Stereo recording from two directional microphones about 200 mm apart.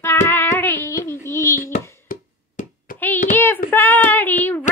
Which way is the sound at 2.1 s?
45° left (ahead or behind).